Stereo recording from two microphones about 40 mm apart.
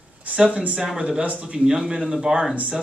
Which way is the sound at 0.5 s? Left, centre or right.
Right.